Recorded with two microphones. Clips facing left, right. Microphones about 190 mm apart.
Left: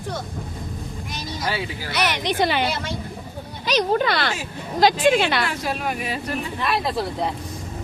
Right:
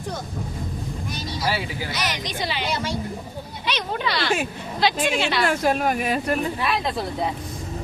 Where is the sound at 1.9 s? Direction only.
60° left (ahead or behind).